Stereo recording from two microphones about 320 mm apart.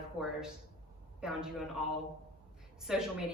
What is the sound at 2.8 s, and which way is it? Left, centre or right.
Speech, centre.